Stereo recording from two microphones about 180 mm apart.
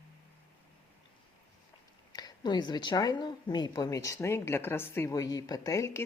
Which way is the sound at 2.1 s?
25° left (ahead or behind).